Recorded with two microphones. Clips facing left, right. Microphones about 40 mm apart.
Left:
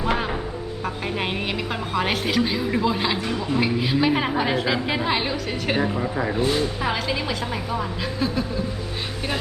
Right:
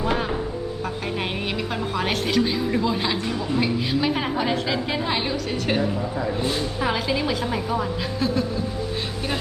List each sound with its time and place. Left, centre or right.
1.0 s a woman's voice: centre
5.8 s a woman's voice: left
6.4 s a woman's voice: centre